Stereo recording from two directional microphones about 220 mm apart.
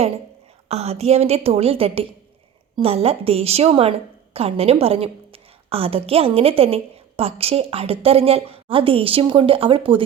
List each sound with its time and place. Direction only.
0.7 s a woman's voice: 30° right (ahead or behind)